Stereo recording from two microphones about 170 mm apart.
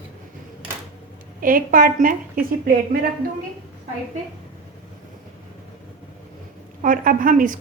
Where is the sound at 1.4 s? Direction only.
55° right (ahead or behind).